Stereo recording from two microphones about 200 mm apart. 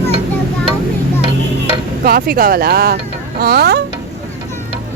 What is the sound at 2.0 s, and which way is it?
Speech, 50° right (ahead or behind).